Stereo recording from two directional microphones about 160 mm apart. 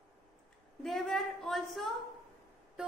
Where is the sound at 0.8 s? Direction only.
Centre (ahead or behind).